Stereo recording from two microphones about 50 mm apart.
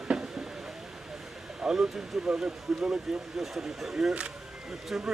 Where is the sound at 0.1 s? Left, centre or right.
Centre.